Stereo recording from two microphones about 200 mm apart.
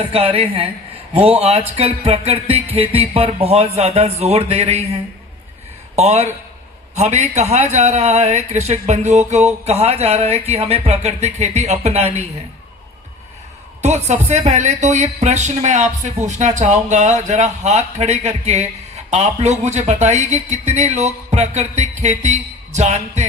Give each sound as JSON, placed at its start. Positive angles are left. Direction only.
{"t": 0.1, "sound": "a woman's voice", "side_deg": -30}
{"t": 6.0, "sound": "speech", "side_deg": -35}
{"t": 13.8, "sound": "speech", "side_deg": -35}